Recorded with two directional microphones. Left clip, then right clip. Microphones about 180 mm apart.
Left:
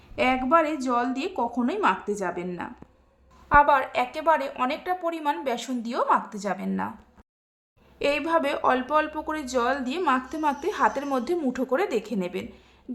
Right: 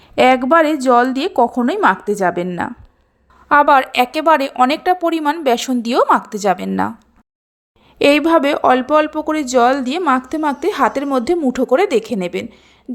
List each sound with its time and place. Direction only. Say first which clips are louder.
0.2 s speech: right 10 dB; 45° right (ahead or behind)
7.9 s speech: right 12 dB; 45° right (ahead or behind)